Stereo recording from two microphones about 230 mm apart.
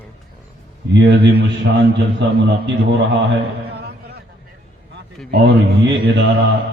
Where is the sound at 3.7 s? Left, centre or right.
Right.